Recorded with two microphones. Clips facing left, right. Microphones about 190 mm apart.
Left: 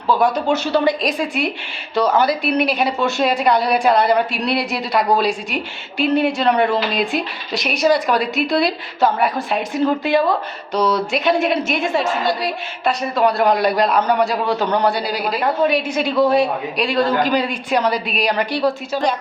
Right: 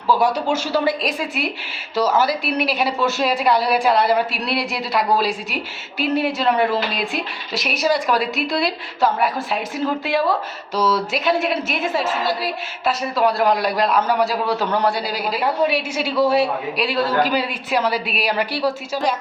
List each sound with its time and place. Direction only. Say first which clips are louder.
0.1 s a woman's voice: left 2 dB; 10° right (ahead or behind)